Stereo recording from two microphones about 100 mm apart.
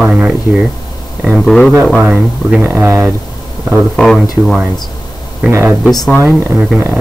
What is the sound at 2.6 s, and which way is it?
Speech, 25° right (ahead or behind).